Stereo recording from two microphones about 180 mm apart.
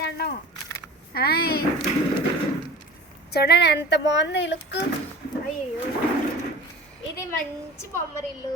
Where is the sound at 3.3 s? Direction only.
65° left (ahead or behind).